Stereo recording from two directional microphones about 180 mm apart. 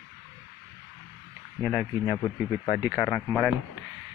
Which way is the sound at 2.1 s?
20° left (ahead or behind).